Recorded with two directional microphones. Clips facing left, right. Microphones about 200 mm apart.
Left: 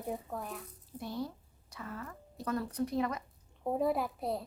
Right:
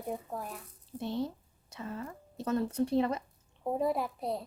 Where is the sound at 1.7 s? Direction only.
25° right (ahead or behind).